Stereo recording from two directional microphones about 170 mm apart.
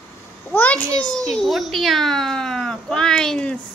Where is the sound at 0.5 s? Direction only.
10° left (ahead or behind).